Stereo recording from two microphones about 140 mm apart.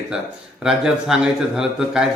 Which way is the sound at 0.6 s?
5° right (ahead or behind).